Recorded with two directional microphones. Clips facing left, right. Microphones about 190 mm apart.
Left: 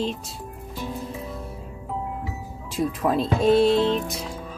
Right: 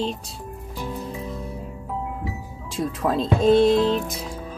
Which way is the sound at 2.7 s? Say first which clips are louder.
Left 1 dB; 10° left (ahead or behind).